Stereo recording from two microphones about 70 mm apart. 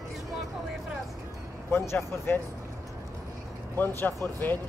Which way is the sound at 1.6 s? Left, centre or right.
Left.